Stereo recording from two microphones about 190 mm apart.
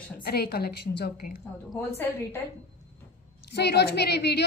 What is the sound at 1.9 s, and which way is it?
Speech, 10° left (ahead or behind).